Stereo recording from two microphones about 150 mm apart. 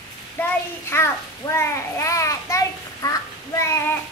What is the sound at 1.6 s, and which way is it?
A child's voice, 20° left (ahead or behind).